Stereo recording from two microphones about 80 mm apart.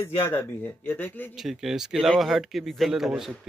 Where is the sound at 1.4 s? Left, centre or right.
Centre.